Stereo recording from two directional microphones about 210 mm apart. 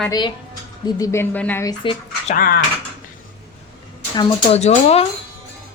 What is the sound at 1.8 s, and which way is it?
Speech, 35° left (ahead or behind).